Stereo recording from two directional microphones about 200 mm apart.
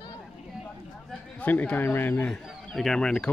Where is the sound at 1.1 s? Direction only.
10° left (ahead or behind).